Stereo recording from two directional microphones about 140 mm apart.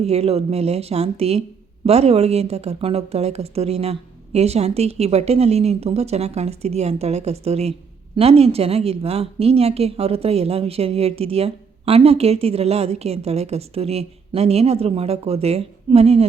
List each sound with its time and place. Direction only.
0.0 s a woman's voice: 50° right (ahead or behind)